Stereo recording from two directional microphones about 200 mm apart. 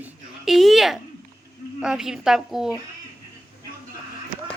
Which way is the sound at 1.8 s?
5° right (ahead or behind).